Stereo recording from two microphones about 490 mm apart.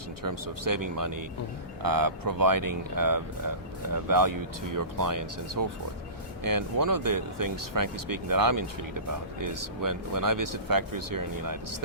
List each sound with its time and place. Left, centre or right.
0.2 s speech: right